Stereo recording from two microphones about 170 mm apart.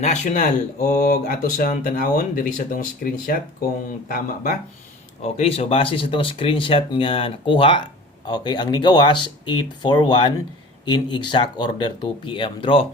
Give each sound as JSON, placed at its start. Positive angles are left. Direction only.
{"t": 0.0, "sound": "speech", "side_deg": 45}
{"t": 5.2, "sound": "speech", "side_deg": 40}